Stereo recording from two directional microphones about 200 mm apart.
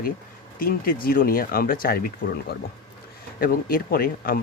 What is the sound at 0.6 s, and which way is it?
Speech, 45° left (ahead or behind).